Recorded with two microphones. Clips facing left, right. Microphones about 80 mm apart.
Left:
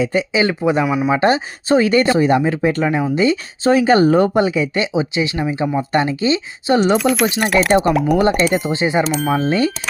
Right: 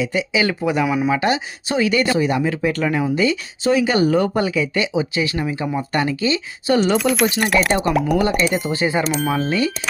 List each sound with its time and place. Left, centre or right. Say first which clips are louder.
0.0 s speech: left 3 dB; left
0.9 s speech: left 1 dB; centre
1.1 s speech: left 4 dB; left
3.2 s speech: left 3 dB; left
6.9 s speech: left 2 dB; centre
8.2 s speech: left 4 dB; left
8.4 s speech: left 3 dB; centre
8.7 s speech: left 3 dB; left
9.0 s speech: left 2 dB; centre
9.4 s speech: left 3 dB; left